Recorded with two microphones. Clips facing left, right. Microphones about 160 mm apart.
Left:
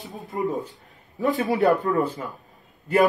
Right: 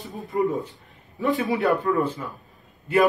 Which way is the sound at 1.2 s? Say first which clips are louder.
Even; 40° left (ahead or behind).